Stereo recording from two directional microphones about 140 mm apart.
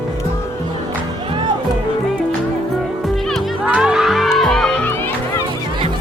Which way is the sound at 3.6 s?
5° right (ahead or behind).